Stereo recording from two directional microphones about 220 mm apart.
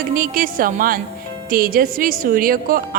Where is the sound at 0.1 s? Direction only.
40° right (ahead or behind).